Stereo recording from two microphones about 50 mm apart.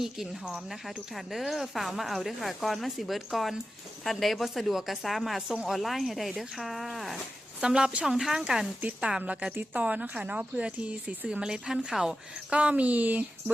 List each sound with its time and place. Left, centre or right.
0.0 s speech: centre
7.6 s a woman's voice: centre
12.5 s speech: right